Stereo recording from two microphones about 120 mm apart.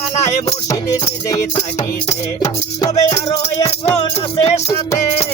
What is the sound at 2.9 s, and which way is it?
Music, 55° left (ahead or behind).